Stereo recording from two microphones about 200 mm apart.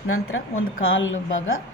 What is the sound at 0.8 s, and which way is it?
Speech, 80° left.